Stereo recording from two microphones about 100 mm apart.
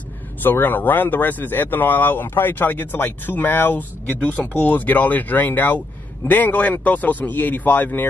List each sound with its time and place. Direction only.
0.4 s speech: 20° left (ahead or behind)